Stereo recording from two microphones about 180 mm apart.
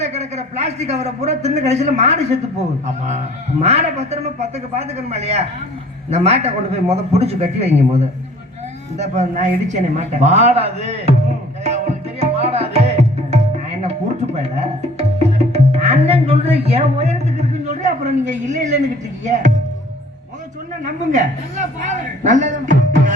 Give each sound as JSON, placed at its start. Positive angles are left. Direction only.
{"t": 0.0, "sound": "a man's voice", "side_deg": -35}
{"t": 3.6, "sound": "a woman's voice", "side_deg": -35}
{"t": 12.2, "sound": "tabla", "side_deg": -35}
{"t": 14.3, "sound": "music", "side_deg": -40}
{"t": 17.3, "sound": "a sound", "side_deg": -40}
{"t": 19.2, "sound": "speech", "side_deg": -45}
{"t": 20.8, "sound": "a woman's voice", "side_deg": -45}